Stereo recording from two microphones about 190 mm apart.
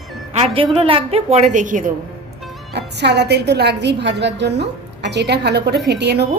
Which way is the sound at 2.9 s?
60° right (ahead or behind).